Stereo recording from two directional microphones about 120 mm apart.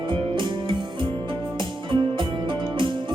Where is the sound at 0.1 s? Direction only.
40° right (ahead or behind).